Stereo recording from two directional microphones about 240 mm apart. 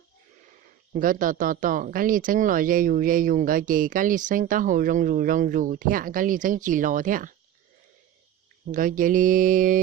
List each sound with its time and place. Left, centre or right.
0.9 s speech: right
8.7 s speech: right